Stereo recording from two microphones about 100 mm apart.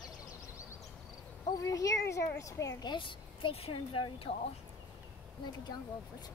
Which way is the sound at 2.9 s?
60° left (ahead or behind).